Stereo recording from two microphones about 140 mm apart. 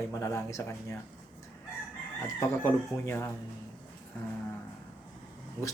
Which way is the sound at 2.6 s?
15° left (ahead or behind).